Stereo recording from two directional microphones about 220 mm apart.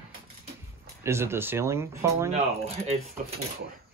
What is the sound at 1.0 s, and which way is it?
Speech, 10° right (ahead or behind).